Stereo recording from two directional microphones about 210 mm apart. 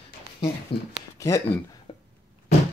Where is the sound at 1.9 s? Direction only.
25° left (ahead or behind).